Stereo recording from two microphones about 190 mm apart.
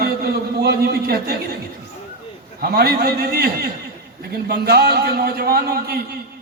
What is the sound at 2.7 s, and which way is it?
A man's voice, 55° right (ahead or behind).